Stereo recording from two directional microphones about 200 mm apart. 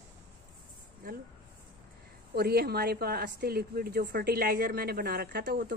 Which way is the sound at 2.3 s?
50° right (ahead or behind).